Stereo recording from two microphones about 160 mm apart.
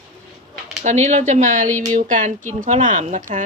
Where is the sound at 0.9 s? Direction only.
50° right (ahead or behind).